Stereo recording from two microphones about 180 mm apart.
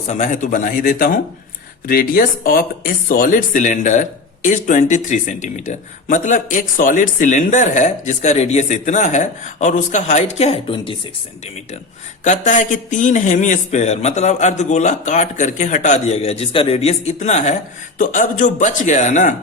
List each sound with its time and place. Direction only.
0.1 s speech: 45° left (ahead or behind)
12.2 s a man's voice: 40° left (ahead or behind)